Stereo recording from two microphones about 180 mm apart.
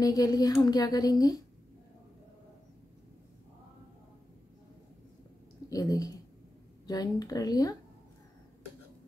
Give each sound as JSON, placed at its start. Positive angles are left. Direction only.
{"t": 0.0, "sound": "speech", "side_deg": 20}
{"t": 5.7, "sound": "speech", "side_deg": 20}